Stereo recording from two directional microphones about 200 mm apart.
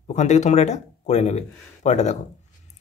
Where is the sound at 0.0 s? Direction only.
35° left (ahead or behind).